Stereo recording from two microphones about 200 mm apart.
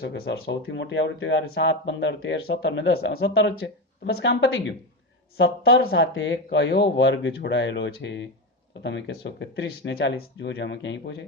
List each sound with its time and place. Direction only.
0.0 s speech: 55° left (ahead or behind)
5.4 s speech: 50° left (ahead or behind)